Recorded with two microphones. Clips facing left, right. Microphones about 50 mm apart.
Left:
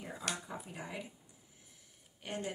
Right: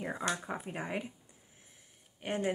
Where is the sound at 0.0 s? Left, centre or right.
Right.